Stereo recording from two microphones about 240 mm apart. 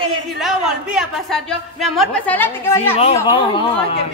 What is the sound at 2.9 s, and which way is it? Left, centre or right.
Speech, left.